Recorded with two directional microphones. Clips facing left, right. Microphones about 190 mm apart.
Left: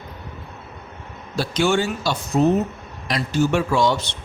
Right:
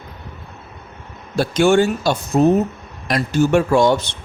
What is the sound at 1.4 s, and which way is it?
Speech, 50° right (ahead or behind).